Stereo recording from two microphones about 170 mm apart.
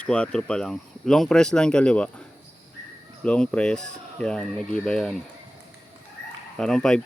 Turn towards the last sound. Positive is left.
turn(degrees=5)  # may be behind; listen again after turning